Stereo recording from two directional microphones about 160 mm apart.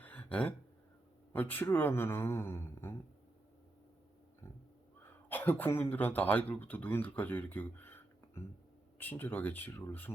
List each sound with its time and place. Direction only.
0.0 s a sound: 10° left (ahead or behind)
1.3 s speech: 10° left (ahead or behind)
4.4 s pig: 15° left (ahead or behind)
4.9 s speech: 15° left (ahead or behind)